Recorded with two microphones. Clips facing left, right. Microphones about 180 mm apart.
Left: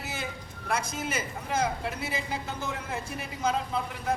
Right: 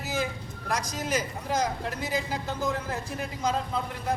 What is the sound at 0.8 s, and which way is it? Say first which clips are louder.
Speech: right 1 dB; 35° right (ahead or behind).